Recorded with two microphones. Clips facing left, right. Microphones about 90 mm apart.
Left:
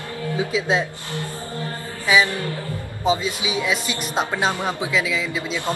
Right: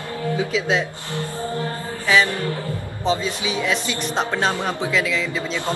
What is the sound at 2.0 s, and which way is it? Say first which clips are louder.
Speech: even; 15° left (ahead or behind).